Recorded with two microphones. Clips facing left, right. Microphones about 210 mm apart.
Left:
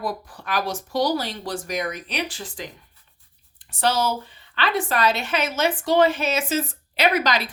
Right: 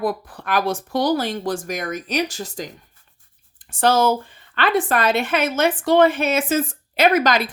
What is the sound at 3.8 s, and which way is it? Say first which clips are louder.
Speech: right 5 dB; 50° right (ahead or behind).